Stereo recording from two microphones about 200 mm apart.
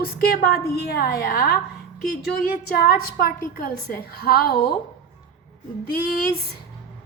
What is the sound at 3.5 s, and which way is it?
A woman's voice, 45° left (ahead or behind).